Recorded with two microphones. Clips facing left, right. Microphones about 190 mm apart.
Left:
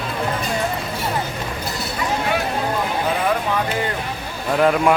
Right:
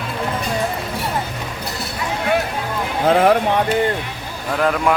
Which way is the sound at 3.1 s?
75° right (ahead or behind).